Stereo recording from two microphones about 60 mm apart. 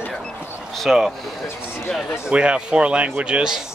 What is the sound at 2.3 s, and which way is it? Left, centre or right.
Speech, centre.